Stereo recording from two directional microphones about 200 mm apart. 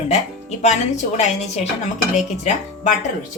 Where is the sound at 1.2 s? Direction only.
35° left (ahead or behind).